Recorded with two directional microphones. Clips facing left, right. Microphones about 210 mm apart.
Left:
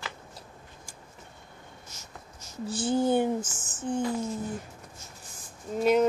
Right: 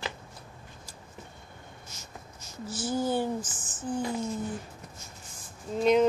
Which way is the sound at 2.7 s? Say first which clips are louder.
Left 4 dB; 30° left (ahead or behind).